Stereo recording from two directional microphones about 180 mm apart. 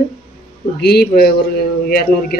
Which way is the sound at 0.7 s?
60° left (ahead or behind).